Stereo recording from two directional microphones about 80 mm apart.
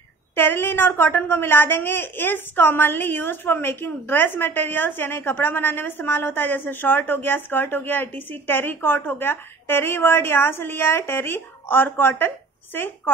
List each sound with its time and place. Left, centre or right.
0.4 s a woman's voice: left